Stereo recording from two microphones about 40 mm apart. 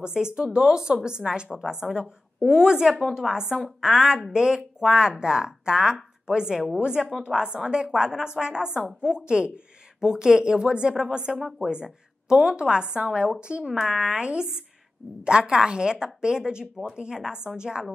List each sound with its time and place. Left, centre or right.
0.0 s a woman's voice: centre
7.2 s a woman's voice: right
11.4 s speech: centre
11.7 s a woman's voice: centre